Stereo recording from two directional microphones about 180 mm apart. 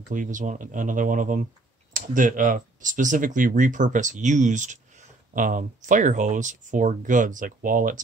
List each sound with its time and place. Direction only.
0.1 s speech: 45° right (ahead or behind)